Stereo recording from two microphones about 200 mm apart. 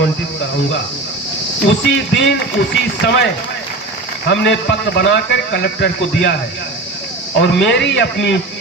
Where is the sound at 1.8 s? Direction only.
65° left (ahead or behind).